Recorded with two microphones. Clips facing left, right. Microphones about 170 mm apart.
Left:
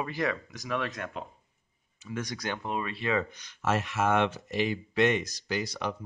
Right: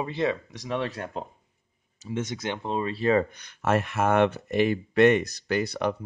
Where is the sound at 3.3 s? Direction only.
60° right (ahead or behind).